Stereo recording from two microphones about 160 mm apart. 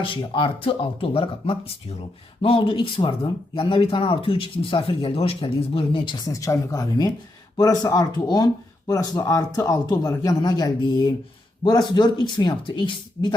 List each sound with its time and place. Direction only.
0.0 s speech: 30° left (ahead or behind)